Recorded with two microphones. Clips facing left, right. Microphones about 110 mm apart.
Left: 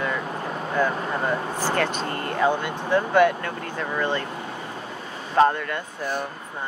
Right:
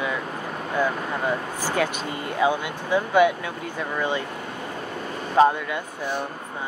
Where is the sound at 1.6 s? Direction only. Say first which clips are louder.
Left 1 dB; 10° right (ahead or behind).